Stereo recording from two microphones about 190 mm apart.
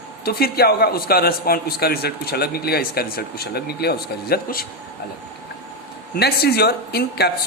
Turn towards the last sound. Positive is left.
turn(degrees=55)  # may be behind; listen again after turning